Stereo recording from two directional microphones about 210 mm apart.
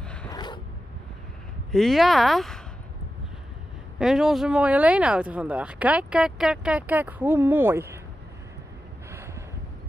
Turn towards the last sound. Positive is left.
turn(degrees=-10)  # may be behind; listen again after turning